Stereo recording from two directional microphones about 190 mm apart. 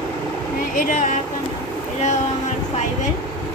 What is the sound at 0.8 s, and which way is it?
Speech, 40° left (ahead or behind).